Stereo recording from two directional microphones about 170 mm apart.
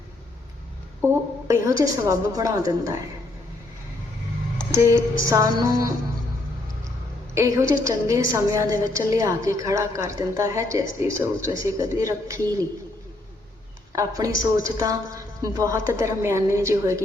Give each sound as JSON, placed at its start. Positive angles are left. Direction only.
{"t": 1.0, "sound": "a woman's voice", "side_deg": -20}
{"t": 4.7, "sound": "a woman's voice", "side_deg": -15}
{"t": 7.3, "sound": "a woman's voice", "side_deg": -15}
{"t": 13.9, "sound": "a woman's voice", "side_deg": -20}